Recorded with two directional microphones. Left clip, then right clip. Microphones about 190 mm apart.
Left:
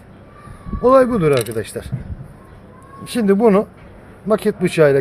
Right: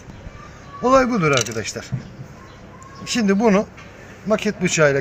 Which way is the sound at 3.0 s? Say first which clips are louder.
Left 4 dB; 50° left (ahead or behind).